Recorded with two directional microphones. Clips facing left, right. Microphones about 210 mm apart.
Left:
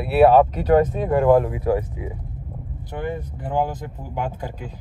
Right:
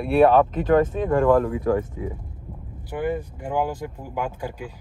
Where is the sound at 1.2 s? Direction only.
20° left (ahead or behind).